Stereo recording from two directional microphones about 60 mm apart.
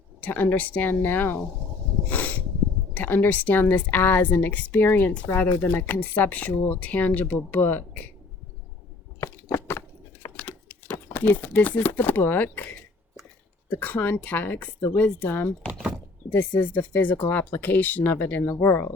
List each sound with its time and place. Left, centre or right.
0.2 s a woman's voice: left
2.0 s a sound: left
2.9 s a woman's voice: left
9.2 s a sound: left
10.3 s a woman's voice: left
15.3 s a woman's voice: left